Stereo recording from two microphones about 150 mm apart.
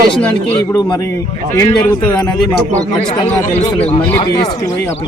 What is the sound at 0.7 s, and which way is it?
Speech, 30° left (ahead or behind).